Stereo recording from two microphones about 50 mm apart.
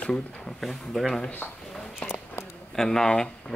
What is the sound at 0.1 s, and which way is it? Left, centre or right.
Speech, centre.